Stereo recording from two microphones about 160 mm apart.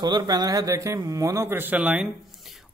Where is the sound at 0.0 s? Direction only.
25° right (ahead or behind).